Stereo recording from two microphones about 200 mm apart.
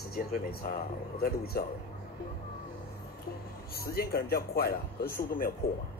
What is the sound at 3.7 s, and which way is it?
Speech, 50° left (ahead or behind).